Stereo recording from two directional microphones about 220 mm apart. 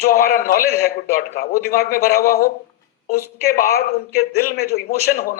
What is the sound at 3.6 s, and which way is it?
A man's voice, 45° left (ahead or behind).